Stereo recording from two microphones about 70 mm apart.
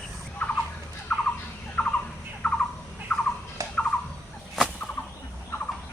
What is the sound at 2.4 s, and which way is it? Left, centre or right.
Bird, centre.